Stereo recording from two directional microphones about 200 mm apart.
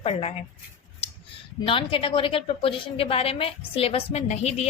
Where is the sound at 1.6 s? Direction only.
25° left (ahead or behind).